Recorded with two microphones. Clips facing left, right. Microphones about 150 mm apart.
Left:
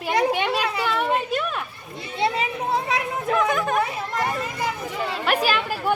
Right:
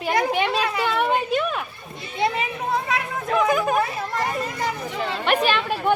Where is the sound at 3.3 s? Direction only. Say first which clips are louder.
Right 2 dB; centre (ahead or behind).